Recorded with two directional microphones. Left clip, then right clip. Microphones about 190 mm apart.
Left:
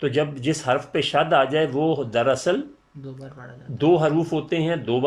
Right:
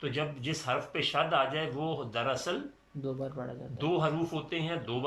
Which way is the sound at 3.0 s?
15° right (ahead or behind).